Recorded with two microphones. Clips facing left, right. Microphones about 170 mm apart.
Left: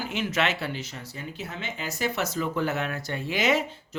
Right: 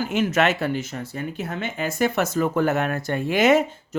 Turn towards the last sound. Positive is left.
turn(degrees=-50)  # may be behind; listen again after turning